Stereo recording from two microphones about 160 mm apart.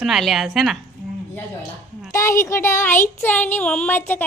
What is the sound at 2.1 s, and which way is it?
Speech, 20° left (ahead or behind).